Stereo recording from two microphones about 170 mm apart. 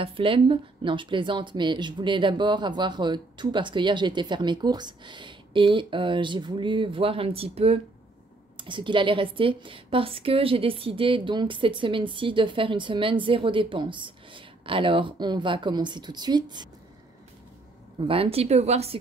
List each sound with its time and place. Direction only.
0.0 s a woman's voice: 30° right (ahead or behind)
18.0 s speech: 35° right (ahead or behind)